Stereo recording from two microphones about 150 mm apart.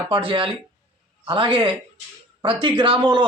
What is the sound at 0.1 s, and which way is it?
Speech, 35° right (ahead or behind).